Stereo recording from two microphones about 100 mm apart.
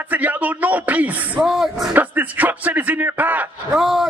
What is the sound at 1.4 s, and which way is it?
Speech, 5° right (ahead or behind).